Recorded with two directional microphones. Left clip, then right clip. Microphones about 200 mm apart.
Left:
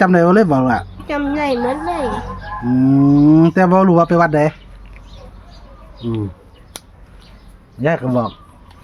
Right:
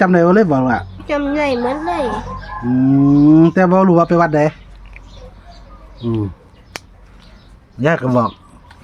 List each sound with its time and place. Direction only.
0.0 s a woman's voice: 5° left (ahead or behind)
7.8 s speech: 15° right (ahead or behind)